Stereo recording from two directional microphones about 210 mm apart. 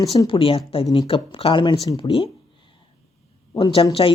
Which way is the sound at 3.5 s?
25° left (ahead or behind).